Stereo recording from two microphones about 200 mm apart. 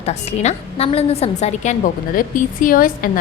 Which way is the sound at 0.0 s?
30° left (ahead or behind).